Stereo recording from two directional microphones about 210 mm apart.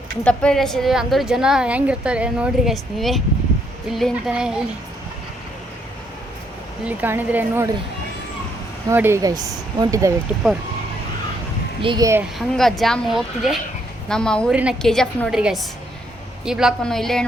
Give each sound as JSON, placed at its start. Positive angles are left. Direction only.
{"t": 0.3, "sound": "a woman's voice", "side_deg": 5}
{"t": 6.8, "sound": "speech", "side_deg": -10}
{"t": 8.9, "sound": "speech", "side_deg": -10}
{"t": 10.4, "sound": "a woman's voice", "side_deg": 0}
{"t": 11.8, "sound": "speech", "side_deg": -20}
{"t": 12.4, "sound": "a woman's voice", "side_deg": 0}